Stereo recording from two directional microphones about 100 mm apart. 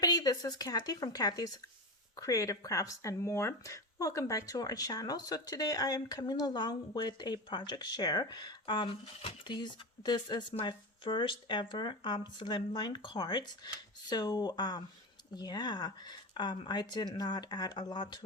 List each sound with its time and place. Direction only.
0.0 s speech: 40° left (ahead or behind)